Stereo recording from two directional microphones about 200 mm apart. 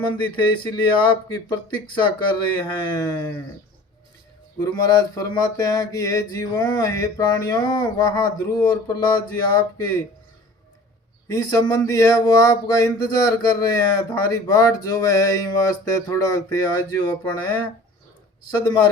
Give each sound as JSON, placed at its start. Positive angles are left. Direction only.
{"t": 0.1, "sound": "speech", "side_deg": 25}
{"t": 4.6, "sound": "speech", "side_deg": 20}
{"t": 11.3, "sound": "speech", "side_deg": 20}
{"t": 18.5, "sound": "speech", "side_deg": 20}